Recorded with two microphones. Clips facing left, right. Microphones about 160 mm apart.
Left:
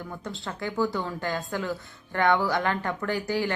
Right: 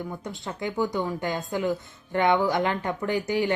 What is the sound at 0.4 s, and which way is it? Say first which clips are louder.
Speech: even; 20° right (ahead or behind).